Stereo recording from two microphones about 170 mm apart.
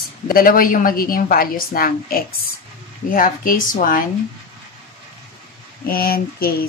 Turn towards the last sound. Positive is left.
turn(degrees=65)  # may be behind; listen again after turning